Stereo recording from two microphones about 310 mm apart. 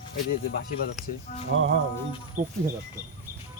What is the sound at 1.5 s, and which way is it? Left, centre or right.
Speech, right.